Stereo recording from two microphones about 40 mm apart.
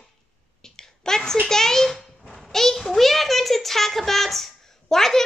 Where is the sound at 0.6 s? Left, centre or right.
Centre.